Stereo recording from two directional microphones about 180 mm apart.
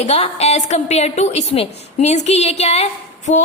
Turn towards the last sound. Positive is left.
turn(degrees=40)  # may be behind; listen again after turning